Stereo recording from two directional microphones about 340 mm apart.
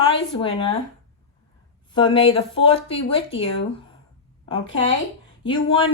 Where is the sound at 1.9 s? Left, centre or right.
Centre.